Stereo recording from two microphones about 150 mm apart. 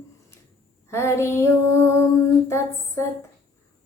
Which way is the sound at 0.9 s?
20° left (ahead or behind).